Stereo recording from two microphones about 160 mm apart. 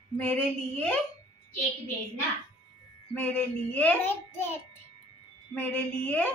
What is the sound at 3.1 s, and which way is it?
Child singing, 10° left (ahead or behind).